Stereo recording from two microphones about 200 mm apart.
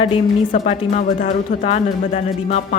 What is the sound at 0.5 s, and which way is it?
Speech, 35° left (ahead or behind).